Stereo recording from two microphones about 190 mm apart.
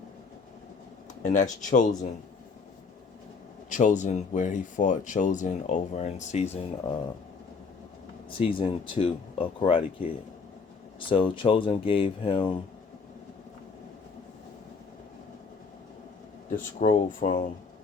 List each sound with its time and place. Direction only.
1.2 s speech: 40° left (ahead or behind)
3.7 s speech: 40° left (ahead or behind)
8.4 s speech: 25° left (ahead or behind)
11.1 s speech: 25° left (ahead or behind)
16.6 s speech: 45° left (ahead or behind)